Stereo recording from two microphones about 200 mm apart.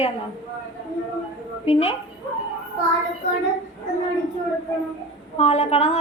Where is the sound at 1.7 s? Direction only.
30° left (ahead or behind).